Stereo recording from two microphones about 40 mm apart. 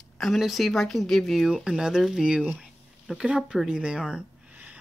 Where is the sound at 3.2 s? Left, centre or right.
Centre.